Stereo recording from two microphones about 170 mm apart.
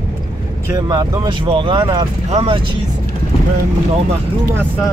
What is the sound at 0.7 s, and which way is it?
Speech, 25° right (ahead or behind).